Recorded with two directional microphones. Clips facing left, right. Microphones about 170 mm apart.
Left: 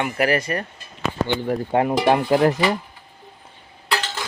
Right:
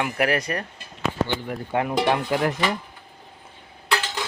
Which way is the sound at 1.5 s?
30° left (ahead or behind).